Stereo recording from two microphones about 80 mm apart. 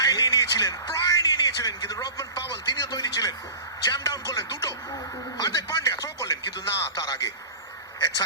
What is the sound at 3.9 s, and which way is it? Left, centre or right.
Speech, left.